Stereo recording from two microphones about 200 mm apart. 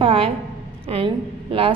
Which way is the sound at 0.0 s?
25° right (ahead or behind).